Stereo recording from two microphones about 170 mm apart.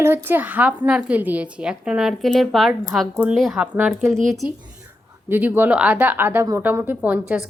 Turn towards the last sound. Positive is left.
turn(degrees=-5)  # may be behind; listen again after turning